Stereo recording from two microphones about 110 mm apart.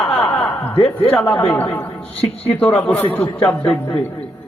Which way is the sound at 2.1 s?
65° left (ahead or behind).